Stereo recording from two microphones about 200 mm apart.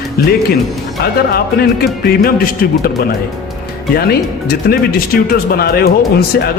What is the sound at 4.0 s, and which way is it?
Speech, 50° left (ahead or behind).